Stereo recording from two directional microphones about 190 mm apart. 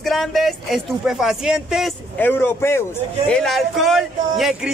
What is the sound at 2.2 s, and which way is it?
Speech, 10° left (ahead or behind).